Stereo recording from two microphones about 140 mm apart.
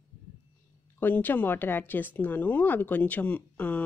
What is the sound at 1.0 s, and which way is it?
Speech, 15° left (ahead or behind).